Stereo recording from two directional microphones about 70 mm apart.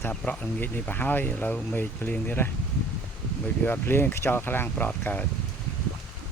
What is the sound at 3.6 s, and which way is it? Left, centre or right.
Speech, left.